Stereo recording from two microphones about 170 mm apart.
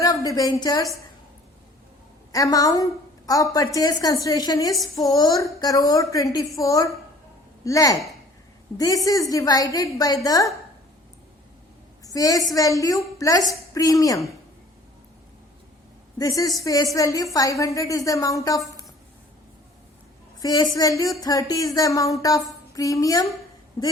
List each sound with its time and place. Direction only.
0.0 s a woman's voice: 20° left (ahead or behind)
2.3 s a woman's voice: 20° left (ahead or behind)
12.0 s a woman's voice: 20° left (ahead or behind)
16.1 s a woman's voice: 20° left (ahead or behind)
20.4 s a woman's voice: 20° left (ahead or behind)